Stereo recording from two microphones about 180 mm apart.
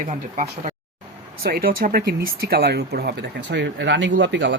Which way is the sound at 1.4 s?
55° right (ahead or behind).